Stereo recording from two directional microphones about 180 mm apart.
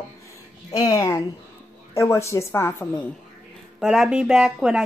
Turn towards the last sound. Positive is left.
turn(degrees=-5)  # may be behind; listen again after turning